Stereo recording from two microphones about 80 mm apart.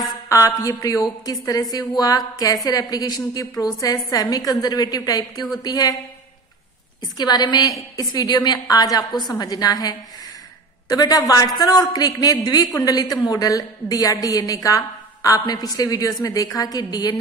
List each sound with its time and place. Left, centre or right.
0.3 s a woman's voice: left
7.2 s speech: left
7.7 s a woman's voice: left